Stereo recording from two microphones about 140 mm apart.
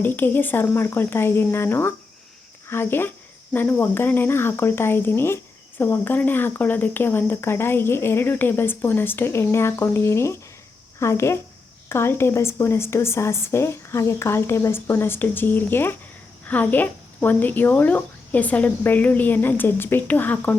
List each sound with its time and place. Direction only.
0.0 s speech: 15° left (ahead or behind)